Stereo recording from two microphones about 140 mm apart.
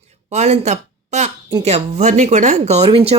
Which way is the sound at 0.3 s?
55° right (ahead or behind).